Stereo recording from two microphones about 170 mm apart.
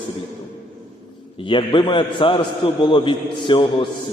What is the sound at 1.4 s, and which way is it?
A man's voice, 30° left (ahead or behind).